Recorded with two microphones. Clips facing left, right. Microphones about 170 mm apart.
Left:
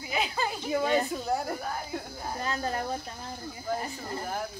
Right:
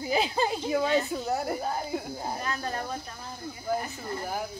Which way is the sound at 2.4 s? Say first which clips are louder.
Left 5 dB; 30° left (ahead or behind).